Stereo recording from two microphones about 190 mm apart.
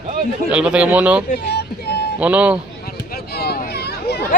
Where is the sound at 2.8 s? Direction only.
55° left (ahead or behind).